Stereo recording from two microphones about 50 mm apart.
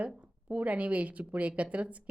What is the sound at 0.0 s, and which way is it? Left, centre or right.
A woman's voice, right.